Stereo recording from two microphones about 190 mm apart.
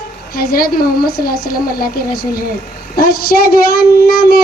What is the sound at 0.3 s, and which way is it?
Speech, 50° left (ahead or behind).